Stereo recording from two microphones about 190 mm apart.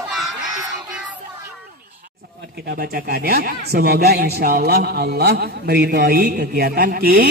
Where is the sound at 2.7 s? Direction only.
55° right (ahead or behind).